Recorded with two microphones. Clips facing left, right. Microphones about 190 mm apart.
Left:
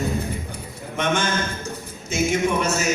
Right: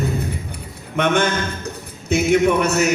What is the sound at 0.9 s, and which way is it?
A man's voice, 60° right (ahead or behind).